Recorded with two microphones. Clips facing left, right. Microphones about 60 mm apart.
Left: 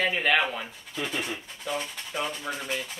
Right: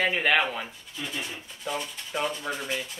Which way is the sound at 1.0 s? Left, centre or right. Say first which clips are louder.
Left 4 dB; left.